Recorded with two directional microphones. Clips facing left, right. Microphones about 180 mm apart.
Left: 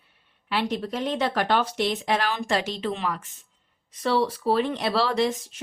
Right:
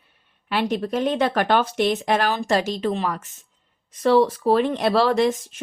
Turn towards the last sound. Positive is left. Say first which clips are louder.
# right 4 dB
turn(degrees=-50)  # may be behind; listen again after turning